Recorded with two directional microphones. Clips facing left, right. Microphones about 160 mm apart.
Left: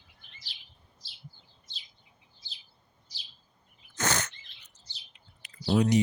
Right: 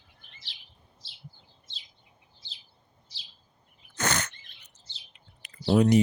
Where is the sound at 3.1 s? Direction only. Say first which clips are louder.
Left 1 dB; 25° right (ahead or behind).